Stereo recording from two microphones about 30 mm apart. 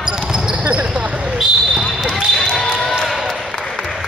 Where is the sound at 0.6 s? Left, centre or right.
Right.